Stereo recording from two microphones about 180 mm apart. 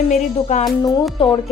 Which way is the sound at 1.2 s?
30° left (ahead or behind).